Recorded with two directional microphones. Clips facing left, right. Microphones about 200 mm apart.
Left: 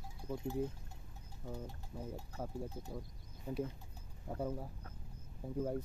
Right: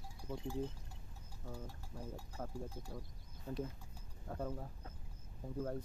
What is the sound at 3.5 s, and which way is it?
Speech, 15° left (ahead or behind).